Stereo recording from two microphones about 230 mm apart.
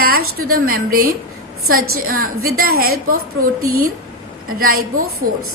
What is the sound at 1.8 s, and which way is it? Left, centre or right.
Speech, right.